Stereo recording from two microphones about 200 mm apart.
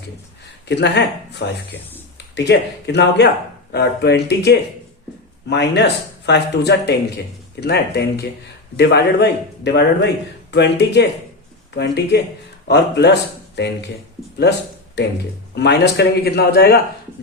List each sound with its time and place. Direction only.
0.7 s speech: 60° left (ahead or behind)
15.5 s speech: 60° left (ahead or behind)